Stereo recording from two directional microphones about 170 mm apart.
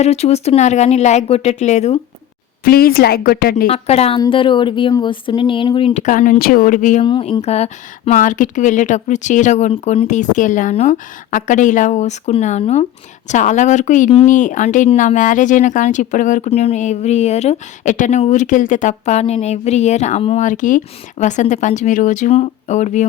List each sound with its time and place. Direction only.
0.0 s speech: 40° left (ahead or behind)
2.6 s a woman's voice: 60° left (ahead or behind)
3.7 s speech: 35° left (ahead or behind)
5.9 s speech: 45° left (ahead or behind)
7.0 s speech: 30° left (ahead or behind)